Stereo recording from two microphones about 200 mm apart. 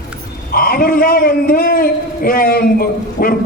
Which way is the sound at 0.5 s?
45° left (ahead or behind).